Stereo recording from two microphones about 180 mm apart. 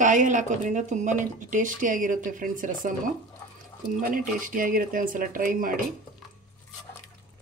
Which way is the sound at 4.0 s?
50° right (ahead or behind).